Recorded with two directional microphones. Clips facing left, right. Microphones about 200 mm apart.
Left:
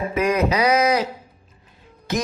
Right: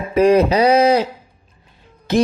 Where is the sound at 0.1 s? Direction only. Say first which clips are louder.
Right 9 dB; 30° right (ahead or behind).